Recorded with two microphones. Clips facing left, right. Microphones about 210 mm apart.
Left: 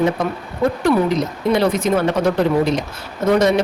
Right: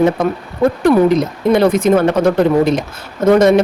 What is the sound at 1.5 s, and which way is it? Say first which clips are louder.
Speech: right 6 dB; 50° right (ahead or behind).